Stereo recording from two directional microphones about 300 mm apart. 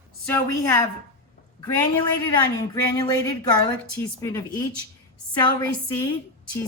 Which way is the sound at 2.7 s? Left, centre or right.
Centre.